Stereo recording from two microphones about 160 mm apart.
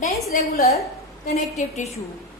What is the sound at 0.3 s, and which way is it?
A woman's voice, 60° left (ahead or behind).